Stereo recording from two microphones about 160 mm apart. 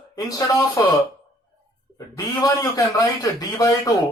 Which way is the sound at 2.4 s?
20° left (ahead or behind).